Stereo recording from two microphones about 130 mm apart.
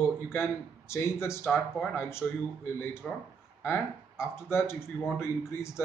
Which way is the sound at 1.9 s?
20° left (ahead or behind).